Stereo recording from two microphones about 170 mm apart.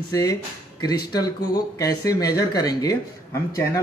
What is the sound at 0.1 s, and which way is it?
Speech, 20° left (ahead or behind).